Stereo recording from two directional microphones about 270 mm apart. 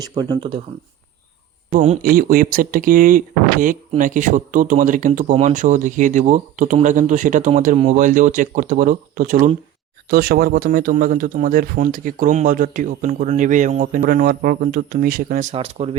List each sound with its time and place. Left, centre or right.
0.1 s speech: centre
1.7 s speech: right